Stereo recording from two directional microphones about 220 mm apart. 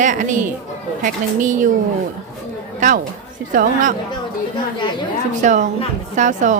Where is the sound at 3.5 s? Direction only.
35° right (ahead or behind).